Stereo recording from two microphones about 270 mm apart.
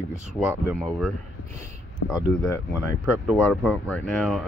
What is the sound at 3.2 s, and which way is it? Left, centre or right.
Speech, centre.